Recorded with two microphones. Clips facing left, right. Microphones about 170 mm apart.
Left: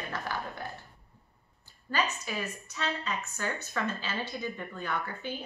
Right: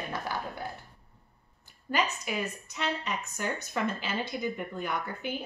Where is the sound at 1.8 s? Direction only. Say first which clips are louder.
Right 2 dB; 15° right (ahead or behind).